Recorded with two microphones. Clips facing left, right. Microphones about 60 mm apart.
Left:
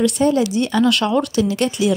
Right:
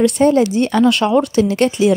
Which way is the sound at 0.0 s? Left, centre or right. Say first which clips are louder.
Right 4 dB; right.